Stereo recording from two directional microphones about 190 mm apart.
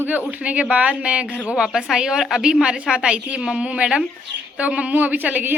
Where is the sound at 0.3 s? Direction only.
5° right (ahead or behind).